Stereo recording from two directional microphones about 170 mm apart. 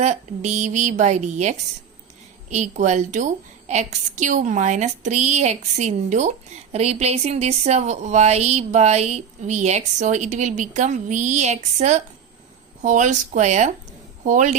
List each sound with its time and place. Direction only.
0.0 s a woman's voice: 40° right (ahead or behind)